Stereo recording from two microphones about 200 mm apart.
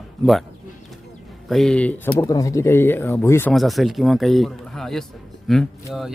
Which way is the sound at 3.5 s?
Centre (ahead or behind).